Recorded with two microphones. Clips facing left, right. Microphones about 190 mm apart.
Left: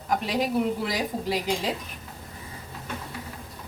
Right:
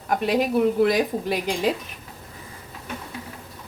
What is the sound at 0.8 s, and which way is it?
Speech, 60° right (ahead or behind).